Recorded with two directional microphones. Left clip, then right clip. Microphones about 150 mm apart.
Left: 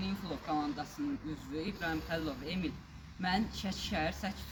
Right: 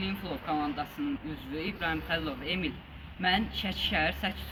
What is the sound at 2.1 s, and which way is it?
Speech, 25° left (ahead or behind).